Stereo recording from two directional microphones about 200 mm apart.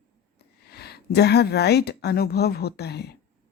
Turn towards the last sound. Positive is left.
turn(degrees=55)  # may be behind; listen again after turning